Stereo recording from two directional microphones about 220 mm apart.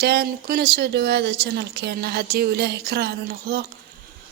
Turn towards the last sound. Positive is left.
turn(degrees=-45)  # may be behind; listen again after turning